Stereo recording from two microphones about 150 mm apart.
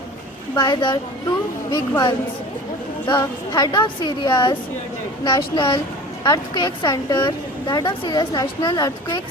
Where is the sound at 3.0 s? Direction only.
30° left (ahead or behind).